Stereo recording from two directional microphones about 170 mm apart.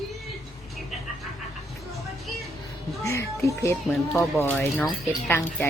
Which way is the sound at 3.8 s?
Centre (ahead or behind).